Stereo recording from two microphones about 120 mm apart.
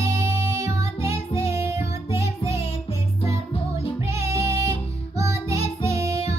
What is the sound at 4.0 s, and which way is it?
Music, 25° right (ahead or behind).